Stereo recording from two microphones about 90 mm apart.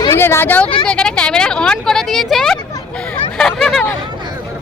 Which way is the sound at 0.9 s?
10° left (ahead or behind).